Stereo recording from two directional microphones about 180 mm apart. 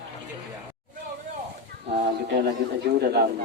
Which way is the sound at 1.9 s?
55° right (ahead or behind).